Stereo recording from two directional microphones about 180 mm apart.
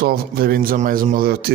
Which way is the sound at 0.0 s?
55° right (ahead or behind).